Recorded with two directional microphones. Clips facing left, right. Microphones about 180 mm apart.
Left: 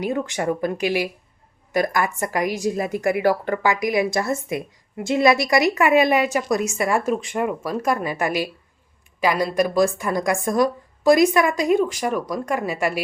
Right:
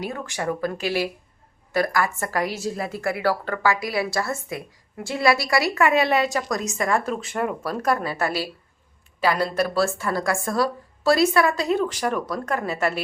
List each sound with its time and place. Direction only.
0.0 s a woman's voice: 20° left (ahead or behind)